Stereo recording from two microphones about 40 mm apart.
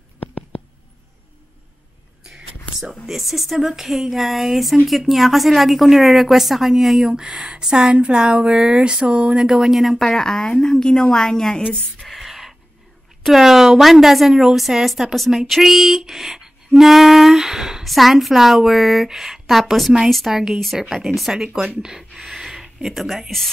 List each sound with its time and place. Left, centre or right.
3.2 s a woman's voice: centre; by 9.4 s right
9.4 s speech: centre
10.1 s a woman's voice: centre
12.0 s a sound: centre
13.2 s a woman's voice: centre
17.8 s a woman's voice: centre
21.3 s speech: right; by 23.5 s centre